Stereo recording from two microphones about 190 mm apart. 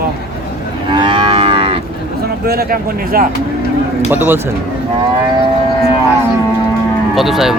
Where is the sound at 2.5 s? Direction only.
50° right (ahead or behind).